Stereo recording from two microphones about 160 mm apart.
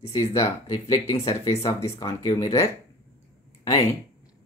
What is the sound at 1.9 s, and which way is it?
Speech, 20° left (ahead or behind).